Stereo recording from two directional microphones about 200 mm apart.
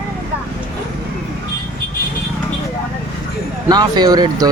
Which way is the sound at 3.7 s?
20° right (ahead or behind).